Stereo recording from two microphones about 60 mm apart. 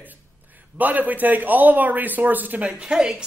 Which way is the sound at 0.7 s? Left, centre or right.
Right.